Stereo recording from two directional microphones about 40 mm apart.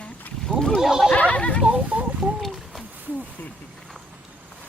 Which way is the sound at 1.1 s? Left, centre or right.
Left.